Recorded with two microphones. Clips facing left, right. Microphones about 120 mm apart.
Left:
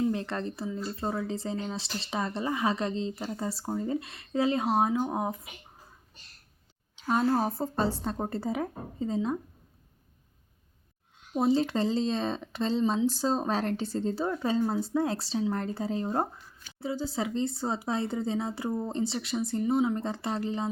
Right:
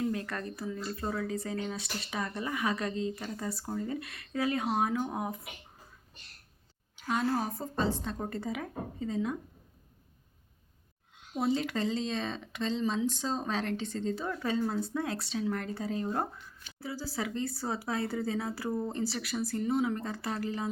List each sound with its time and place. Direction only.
0.0 s speech: 25° left (ahead or behind)
7.1 s a woman's voice: 35° left (ahead or behind)
11.3 s a woman's voice: 30° left (ahead or behind)